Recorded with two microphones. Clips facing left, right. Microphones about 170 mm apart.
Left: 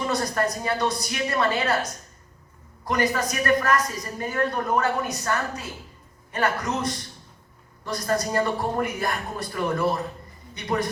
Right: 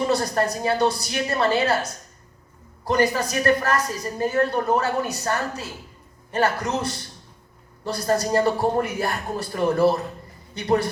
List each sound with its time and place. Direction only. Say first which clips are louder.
0.1 s speech: right 3 dB; 30° right (ahead or behind)
2.8 s speech: right 3 dB; 30° right (ahead or behind)